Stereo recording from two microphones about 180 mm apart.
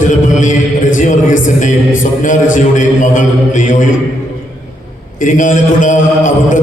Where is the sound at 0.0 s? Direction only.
45° left (ahead or behind).